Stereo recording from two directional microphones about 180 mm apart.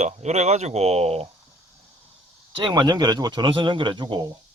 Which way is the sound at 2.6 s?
25° right (ahead or behind).